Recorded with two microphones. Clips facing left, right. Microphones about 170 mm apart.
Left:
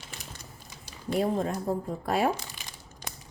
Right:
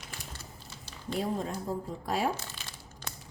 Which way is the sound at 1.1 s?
60° left (ahead or behind).